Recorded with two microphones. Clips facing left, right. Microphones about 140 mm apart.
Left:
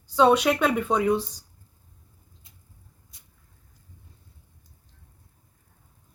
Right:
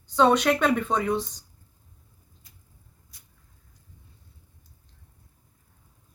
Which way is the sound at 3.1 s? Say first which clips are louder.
Even; 25° left (ahead or behind).